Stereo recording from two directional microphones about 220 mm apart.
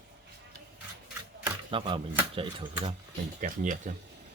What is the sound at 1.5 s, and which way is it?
Speech, 20° right (ahead or behind).